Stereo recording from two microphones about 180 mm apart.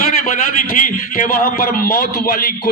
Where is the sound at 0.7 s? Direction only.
50° left (ahead or behind).